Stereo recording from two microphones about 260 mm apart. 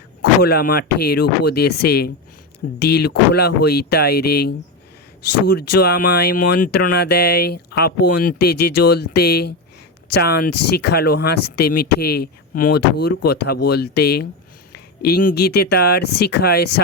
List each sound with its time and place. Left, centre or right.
0.2 s speech: left